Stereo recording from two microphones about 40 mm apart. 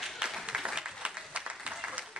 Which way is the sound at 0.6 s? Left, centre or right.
Right.